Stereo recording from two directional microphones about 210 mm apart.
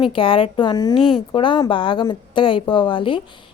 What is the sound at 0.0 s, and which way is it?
A woman's voice, 25° left (ahead or behind).